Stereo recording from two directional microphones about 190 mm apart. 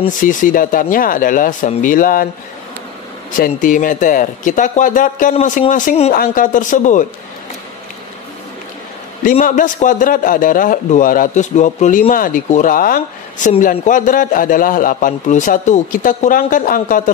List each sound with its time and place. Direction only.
0.2 s a man's voice: 45° left (ahead or behind)
3.3 s a man's voice: 45° left (ahead or behind)
9.2 s a man's voice: 45° left (ahead or behind)